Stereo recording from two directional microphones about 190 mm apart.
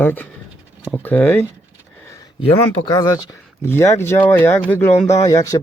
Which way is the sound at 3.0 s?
20° left (ahead or behind).